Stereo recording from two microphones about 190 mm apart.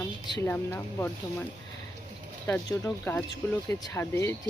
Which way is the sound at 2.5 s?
15° left (ahead or behind).